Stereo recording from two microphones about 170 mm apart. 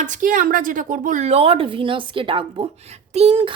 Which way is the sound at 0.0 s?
50° right (ahead or behind).